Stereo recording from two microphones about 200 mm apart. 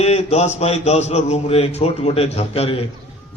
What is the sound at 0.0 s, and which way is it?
A man's voice, 30° left (ahead or behind).